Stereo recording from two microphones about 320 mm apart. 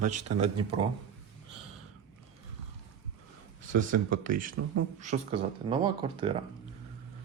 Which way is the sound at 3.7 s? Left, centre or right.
Right.